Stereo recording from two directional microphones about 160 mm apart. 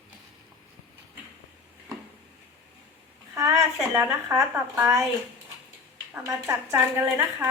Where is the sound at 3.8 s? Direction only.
10° right (ahead or behind).